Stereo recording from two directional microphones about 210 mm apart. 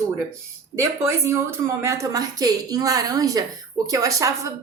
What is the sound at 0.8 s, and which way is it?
A woman's voice, 10° right (ahead or behind).